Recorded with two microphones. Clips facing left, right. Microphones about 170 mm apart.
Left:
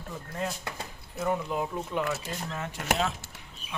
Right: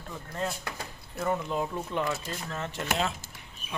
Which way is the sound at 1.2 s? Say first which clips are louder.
Even; 5° left (ahead or behind).